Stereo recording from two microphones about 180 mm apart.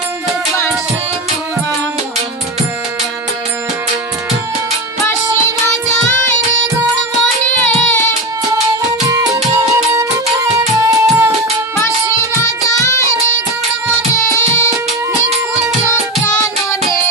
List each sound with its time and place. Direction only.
9.9 s music: 15° right (ahead or behind)
12.4 s music: 20° left (ahead or behind)